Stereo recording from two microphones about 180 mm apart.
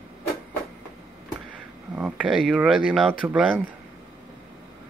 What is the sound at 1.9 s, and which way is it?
Speech, 5° right (ahead or behind).